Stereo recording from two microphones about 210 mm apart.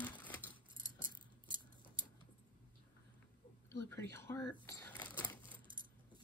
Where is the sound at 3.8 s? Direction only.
10° left (ahead or behind).